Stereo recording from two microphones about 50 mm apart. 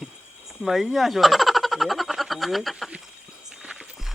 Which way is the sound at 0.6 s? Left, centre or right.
Centre.